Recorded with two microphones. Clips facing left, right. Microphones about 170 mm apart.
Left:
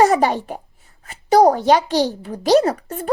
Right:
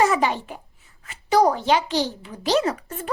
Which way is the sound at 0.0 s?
40° left (ahead or behind).